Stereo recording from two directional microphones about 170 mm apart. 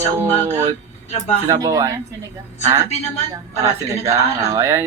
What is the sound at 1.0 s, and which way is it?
Speech, 40° left (ahead or behind).